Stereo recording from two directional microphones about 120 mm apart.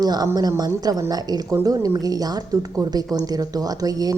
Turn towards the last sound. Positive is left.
turn(degrees=-30)  # may be behind; listen again after turning